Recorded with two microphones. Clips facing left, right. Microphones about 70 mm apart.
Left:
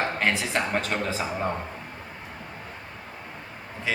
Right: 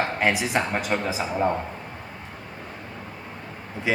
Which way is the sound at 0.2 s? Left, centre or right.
Centre.